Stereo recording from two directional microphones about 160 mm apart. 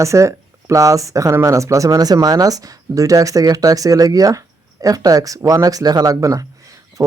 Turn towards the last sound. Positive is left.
turn(degrees=-20)  # may be behind; listen again after turning